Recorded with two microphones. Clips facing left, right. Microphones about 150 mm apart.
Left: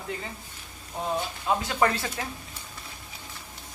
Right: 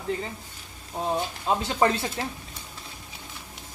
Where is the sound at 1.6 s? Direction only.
25° right (ahead or behind).